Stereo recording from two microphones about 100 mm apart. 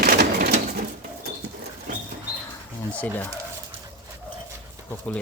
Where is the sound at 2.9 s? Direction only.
15° left (ahead or behind).